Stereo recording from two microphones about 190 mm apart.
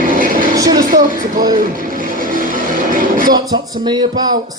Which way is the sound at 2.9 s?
45° right (ahead or behind).